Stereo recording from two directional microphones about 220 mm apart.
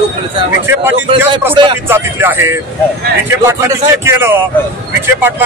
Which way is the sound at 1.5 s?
20° right (ahead or behind).